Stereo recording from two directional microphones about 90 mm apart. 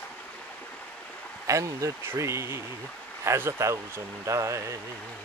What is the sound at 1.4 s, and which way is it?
Speech, 35° right (ahead or behind).